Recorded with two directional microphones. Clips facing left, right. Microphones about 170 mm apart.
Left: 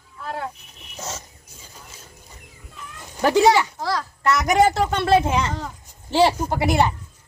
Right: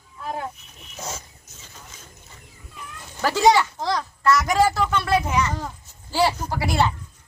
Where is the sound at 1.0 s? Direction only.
10° right (ahead or behind).